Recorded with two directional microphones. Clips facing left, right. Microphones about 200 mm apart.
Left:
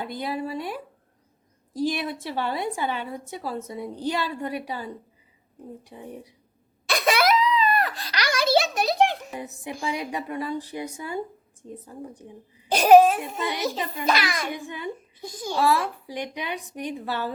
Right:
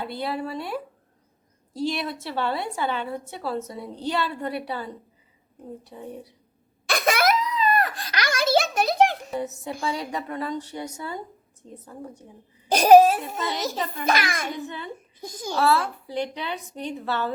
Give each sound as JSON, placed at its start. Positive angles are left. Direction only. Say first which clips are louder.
{"t": 0.0, "sound": "a woman's voice", "louder": "even", "side_deg": 15}
{"t": 6.8, "sound": "crying", "louder": "even", "side_deg": -50}
{"t": 9.3, "sound": "a woman's voice", "louder": "right 5 dB", "side_deg": 15}
{"t": 12.6, "sound": "babbling", "louder": "right 1 dB", "side_deg": -40}
{"t": 14.1, "sound": "a child's voice", "louder": "even", "side_deg": -50}
{"t": 14.5, "sound": "a woman's voice", "louder": "left 1 dB", "side_deg": 15}